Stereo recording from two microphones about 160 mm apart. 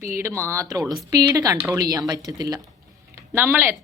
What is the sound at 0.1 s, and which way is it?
Speech, 15° right (ahead or behind).